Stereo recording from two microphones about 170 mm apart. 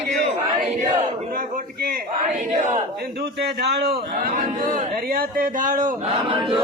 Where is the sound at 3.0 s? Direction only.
70° right (ahead or behind).